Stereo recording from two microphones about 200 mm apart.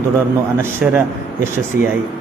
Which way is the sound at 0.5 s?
10° right (ahead or behind).